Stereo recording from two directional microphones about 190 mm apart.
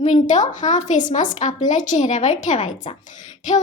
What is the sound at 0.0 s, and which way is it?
A woman's voice, 40° left (ahead or behind).